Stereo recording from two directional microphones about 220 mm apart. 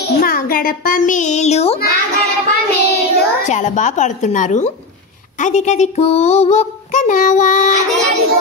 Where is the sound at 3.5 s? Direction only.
35° left (ahead or behind).